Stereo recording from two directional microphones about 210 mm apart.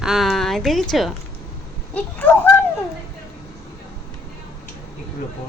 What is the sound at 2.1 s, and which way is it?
Speech, 10° left (ahead or behind).